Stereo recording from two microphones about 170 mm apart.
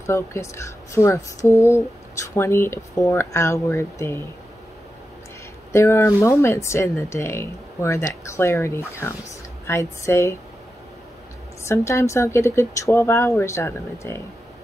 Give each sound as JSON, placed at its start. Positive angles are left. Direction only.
{"t": 0.0, "sound": "speech", "side_deg": 15}
{"t": 5.7, "sound": "speech", "side_deg": 15}
{"t": 11.6, "sound": "speech", "side_deg": 15}